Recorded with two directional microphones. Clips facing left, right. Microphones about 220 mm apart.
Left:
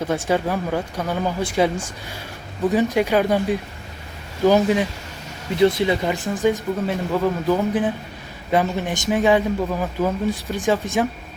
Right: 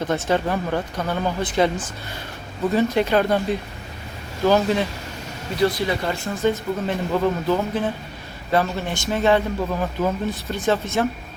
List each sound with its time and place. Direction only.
0.0 s a man's voice: 10° left (ahead or behind)